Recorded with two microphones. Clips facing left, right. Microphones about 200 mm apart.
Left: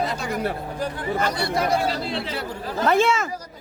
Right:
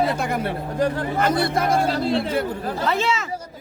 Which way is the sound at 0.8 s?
50° right (ahead or behind).